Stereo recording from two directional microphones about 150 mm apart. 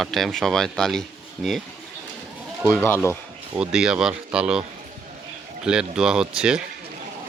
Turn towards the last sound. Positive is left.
turn(degrees=-5)  # may be behind; listen again after turning